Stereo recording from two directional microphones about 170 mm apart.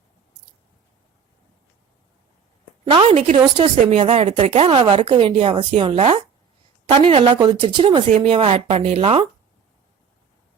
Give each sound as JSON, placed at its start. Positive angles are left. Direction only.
{"t": 2.8, "sound": "a woman's voice", "side_deg": -30}